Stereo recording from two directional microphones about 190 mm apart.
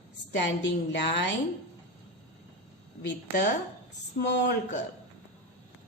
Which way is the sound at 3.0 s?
65° left (ahead or behind).